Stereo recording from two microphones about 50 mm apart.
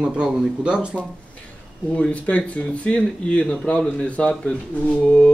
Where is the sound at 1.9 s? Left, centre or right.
Left.